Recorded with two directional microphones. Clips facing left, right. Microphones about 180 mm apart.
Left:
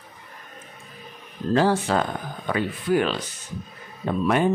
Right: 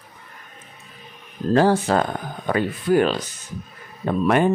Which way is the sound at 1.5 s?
45° right (ahead or behind).